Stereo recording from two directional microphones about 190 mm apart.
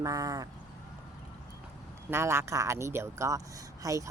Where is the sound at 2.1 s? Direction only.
15° right (ahead or behind).